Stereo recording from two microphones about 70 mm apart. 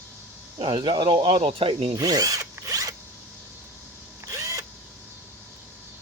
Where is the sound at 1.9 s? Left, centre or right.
Right.